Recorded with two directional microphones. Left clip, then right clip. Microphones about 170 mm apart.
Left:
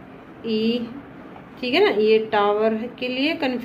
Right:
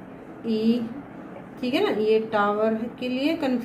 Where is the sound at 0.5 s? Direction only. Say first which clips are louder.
Left 2 dB; 50° left (ahead or behind).